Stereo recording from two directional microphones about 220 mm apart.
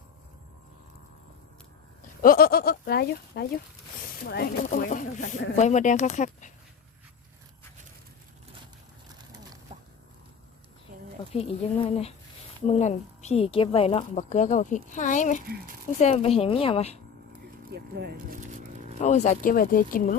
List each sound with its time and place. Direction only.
2.0 s a sound: 40° left (ahead or behind)
4.2 s speech: 45° left (ahead or behind)
11.3 s speech: 25° left (ahead or behind)
17.7 s speech: 45° right (ahead or behind)
19.0 s speech: 30° left (ahead or behind)